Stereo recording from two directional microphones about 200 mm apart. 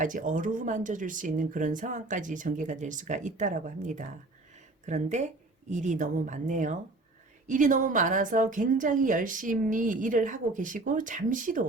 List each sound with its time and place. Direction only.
0.0 s a woman's voice: 40° right (ahead or behind)